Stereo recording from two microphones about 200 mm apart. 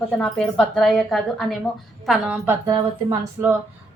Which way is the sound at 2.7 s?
20° right (ahead or behind).